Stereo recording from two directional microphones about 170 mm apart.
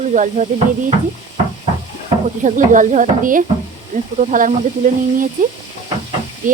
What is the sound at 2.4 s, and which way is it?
Speech, 50° right (ahead or behind).